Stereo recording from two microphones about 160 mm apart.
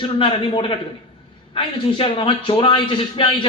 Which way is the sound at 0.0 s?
30° left (ahead or behind).